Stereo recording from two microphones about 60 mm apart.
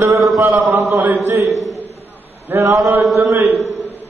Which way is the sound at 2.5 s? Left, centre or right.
Right.